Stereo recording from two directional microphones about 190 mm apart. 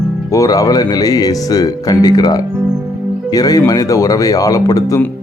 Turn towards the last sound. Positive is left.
turn(degrees=15)  # may be behind; listen again after turning